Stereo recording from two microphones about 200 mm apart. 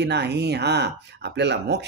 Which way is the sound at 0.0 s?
55° right (ahead or behind).